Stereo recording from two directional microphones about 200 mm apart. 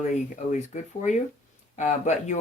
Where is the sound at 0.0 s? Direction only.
35° left (ahead or behind).